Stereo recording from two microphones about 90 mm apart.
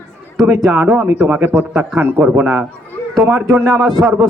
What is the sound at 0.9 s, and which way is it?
A man's voice, 15° right (ahead or behind).